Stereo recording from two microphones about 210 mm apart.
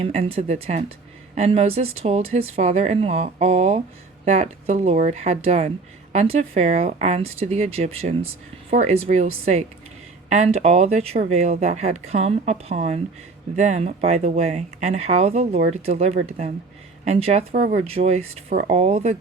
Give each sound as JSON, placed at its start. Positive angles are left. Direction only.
{"t": 0.0, "sound": "speech", "side_deg": -30}